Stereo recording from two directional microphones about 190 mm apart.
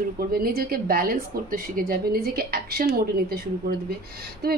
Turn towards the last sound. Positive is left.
turn(degrees=-55)  # may be behind; listen again after turning